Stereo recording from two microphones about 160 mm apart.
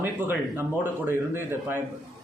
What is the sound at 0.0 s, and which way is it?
Speech, 10° right (ahead or behind).